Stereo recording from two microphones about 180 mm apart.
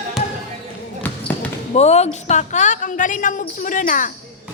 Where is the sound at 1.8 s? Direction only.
35° left (ahead or behind).